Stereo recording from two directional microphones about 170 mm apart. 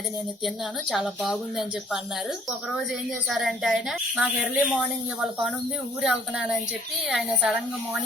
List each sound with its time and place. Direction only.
0.4 s a woman's voice: 5° right (ahead or behind)
3.2 s a woman's voice: centre (ahead or behind)